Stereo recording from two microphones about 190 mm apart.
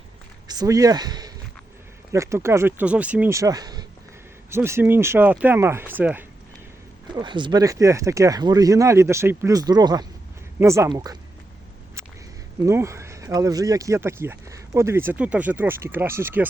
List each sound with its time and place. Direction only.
0.4 s speech: 20° right (ahead or behind)
7.1 s speech: 25° right (ahead or behind)
12.6 s speech: 15° right (ahead or behind)